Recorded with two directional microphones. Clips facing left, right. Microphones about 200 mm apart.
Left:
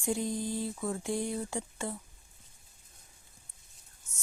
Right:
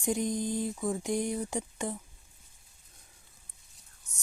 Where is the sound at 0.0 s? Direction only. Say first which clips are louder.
Right 2 dB; 15° right (ahead or behind).